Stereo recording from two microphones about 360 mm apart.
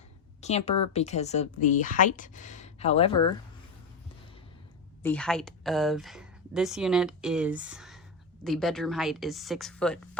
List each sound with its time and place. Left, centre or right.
0.4 s a woman's voice: centre
5.0 s a woman's voice: centre